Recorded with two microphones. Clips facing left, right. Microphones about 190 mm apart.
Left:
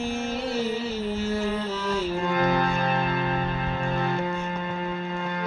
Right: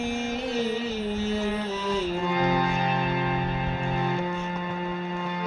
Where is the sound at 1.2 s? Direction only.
20° right (ahead or behind).